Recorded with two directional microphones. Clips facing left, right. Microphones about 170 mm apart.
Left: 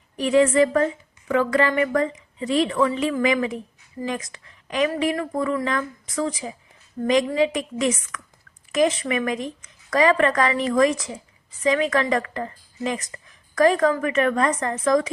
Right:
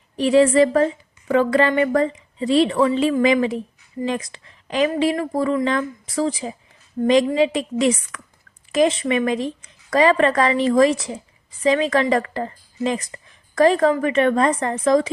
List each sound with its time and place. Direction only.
0.2 s a woman's voice: 30° right (ahead or behind)